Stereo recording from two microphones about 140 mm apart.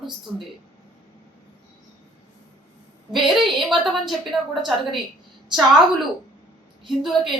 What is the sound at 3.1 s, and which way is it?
Speech, centre (ahead or behind).